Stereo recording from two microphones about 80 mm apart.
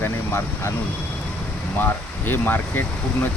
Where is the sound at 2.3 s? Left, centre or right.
Left.